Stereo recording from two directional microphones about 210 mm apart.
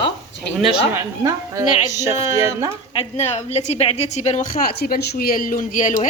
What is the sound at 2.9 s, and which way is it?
A woman's voice, 30° left (ahead or behind).